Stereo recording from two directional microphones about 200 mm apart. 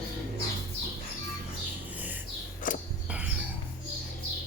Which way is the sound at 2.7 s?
40° left (ahead or behind).